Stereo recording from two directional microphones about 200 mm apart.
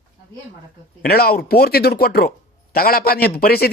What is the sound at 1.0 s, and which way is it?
A man's voice, 50° left (ahead or behind).